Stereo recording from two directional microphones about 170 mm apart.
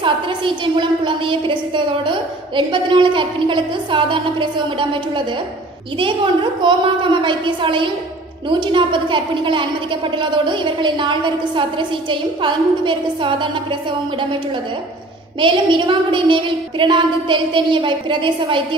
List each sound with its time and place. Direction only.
0.7 s a woman's voice: 30° right (ahead or behind)
6.6 s a woman's voice: 30° right (ahead or behind)
15.4 s a woman's voice: 30° right (ahead or behind)